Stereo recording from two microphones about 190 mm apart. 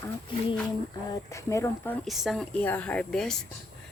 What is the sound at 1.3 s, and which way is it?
Speech, 15° left (ahead or behind).